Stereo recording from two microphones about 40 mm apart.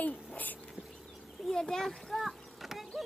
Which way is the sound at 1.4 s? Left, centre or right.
Centre.